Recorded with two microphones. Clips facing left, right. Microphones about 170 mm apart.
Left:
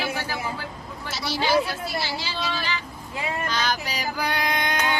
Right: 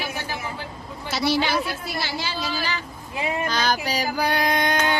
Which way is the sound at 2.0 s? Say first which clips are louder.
Right 1 dB; 55° right (ahead or behind).